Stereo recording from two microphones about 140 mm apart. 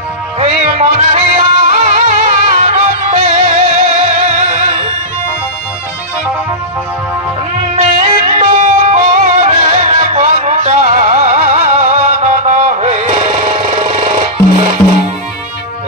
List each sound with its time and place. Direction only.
0.4 s music: 50° right (ahead or behind)
7.7 s music: 55° right (ahead or behind)